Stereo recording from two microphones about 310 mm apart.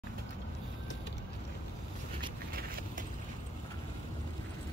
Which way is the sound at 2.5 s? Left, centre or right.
Right.